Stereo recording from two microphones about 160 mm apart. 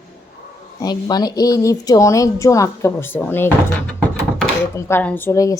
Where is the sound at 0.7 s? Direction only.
25° left (ahead or behind).